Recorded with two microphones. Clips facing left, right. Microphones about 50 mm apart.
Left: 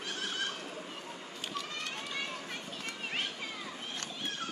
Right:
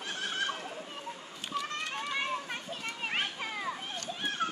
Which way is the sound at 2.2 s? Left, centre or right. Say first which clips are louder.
Right 5 dB; right.